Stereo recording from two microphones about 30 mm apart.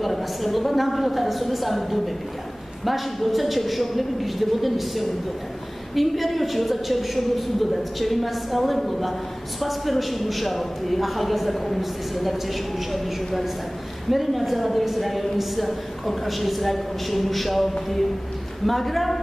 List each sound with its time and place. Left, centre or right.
0.0 s a man's voice: centre
18.7 s a man's voice: centre